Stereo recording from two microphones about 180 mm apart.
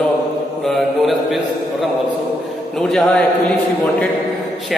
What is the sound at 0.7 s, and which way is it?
Mantra, centre (ahead or behind).